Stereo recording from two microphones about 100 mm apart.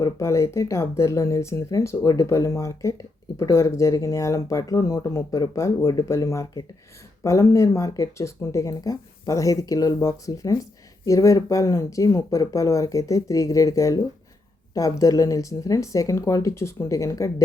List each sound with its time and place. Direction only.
0.0 s speech: 30° left (ahead or behind)